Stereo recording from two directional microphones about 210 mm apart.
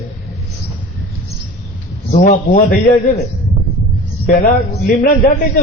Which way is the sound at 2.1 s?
40° left (ahead or behind).